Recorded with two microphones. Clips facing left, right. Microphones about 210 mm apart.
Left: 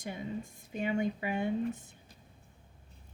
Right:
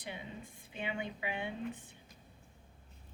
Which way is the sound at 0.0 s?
45° left (ahead or behind).